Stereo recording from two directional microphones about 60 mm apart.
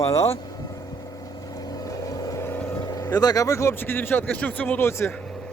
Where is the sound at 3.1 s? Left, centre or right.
Left.